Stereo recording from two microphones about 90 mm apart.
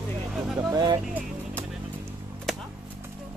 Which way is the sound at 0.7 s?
45° right (ahead or behind).